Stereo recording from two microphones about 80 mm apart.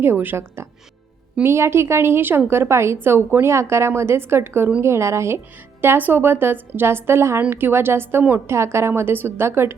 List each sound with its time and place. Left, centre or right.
0.0 s a woman's voice: right
5.8 s a woman's voice: right